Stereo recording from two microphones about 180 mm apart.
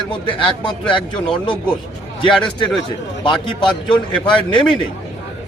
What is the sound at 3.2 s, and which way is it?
A man's voice, 30° left (ahead or behind).